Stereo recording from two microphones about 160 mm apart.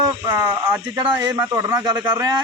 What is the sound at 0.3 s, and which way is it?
Speech, 15° right (ahead or behind).